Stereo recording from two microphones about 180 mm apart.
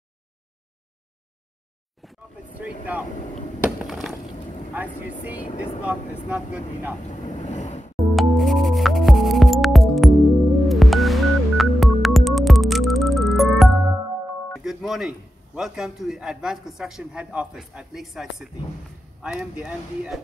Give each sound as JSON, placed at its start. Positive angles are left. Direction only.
{"t": 2.0, "sound": "vehicle", "side_deg": -5}
{"t": 3.6, "sound": "a sound", "side_deg": 0}
{"t": 4.7, "sound": "speech", "side_deg": -10}
{"t": 7.1, "sound": "speech", "side_deg": 40}
{"t": 7.9, "sound": "music", "side_deg": 0}
{"t": 14.5, "sound": "a man's voice", "side_deg": 0}